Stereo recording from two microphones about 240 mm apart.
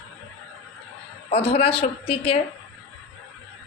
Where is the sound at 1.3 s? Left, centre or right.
Left.